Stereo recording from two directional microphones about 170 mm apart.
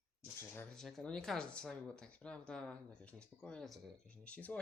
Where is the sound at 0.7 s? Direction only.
Centre (ahead or behind).